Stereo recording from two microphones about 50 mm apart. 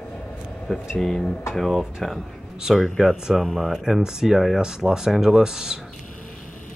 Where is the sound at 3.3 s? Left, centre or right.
Centre.